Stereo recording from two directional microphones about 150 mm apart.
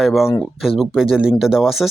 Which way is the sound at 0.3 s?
15° left (ahead or behind).